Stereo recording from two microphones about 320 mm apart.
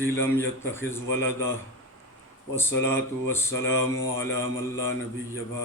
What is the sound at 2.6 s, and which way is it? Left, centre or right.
Speech, centre.